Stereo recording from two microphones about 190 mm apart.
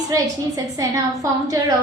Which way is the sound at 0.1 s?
15° right (ahead or behind).